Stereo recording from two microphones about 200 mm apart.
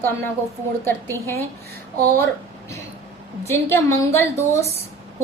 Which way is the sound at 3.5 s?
10° left (ahead or behind).